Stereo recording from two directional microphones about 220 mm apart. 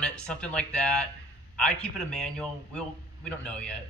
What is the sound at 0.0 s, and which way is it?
A man's voice, 5° left (ahead or behind).